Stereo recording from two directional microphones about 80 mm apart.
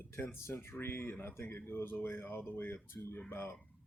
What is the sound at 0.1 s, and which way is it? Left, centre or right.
Speech, left.